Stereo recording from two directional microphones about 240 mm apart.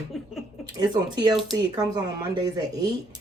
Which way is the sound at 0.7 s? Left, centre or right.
Centre.